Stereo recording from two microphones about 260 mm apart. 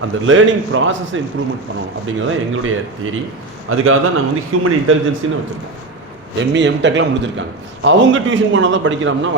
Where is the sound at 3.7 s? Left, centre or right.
Right.